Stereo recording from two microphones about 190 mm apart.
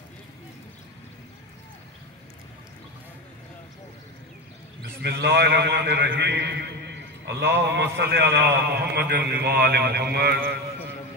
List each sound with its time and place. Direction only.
5.0 s a man's voice: 60° right (ahead or behind)